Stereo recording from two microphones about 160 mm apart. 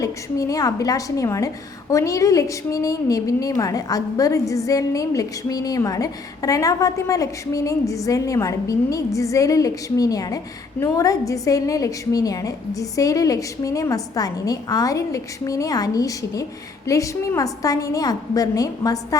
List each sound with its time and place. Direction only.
0.0 s a woman's voice: 20° left (ahead or behind)